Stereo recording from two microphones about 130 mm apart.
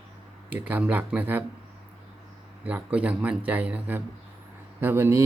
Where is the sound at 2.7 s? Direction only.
10° right (ahead or behind).